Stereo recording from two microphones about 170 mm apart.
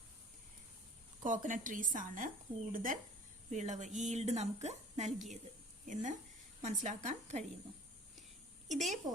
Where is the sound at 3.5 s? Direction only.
45° right (ahead or behind).